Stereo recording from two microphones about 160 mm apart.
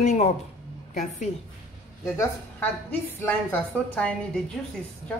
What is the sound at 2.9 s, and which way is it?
A woman's voice, 15° left (ahead or behind).